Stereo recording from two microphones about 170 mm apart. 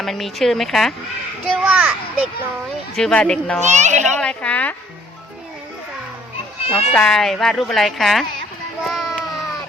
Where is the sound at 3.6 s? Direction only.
45° right (ahead or behind).